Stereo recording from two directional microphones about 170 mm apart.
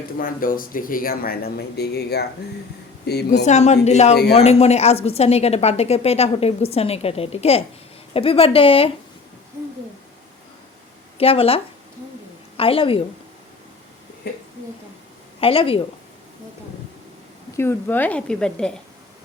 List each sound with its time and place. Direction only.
0.2 s speech: 55° left (ahead or behind); by 2.2 s 70° left (ahead or behind)
3.2 s a woman's voice: 45° left (ahead or behind)
4.1 s a man's voice: 70° left (ahead or behind)
4.4 s a woman's voice: 40° left (ahead or behind)
11.2 s a woman's voice: 35° left (ahead or behind)
15.4 s a woman's voice: 35° left (ahead or behind)
17.6 s speech: 10° left (ahead or behind)